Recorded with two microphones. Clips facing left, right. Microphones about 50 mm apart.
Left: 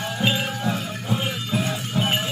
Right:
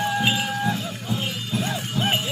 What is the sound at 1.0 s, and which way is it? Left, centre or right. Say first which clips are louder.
Music: left 4 dB; left.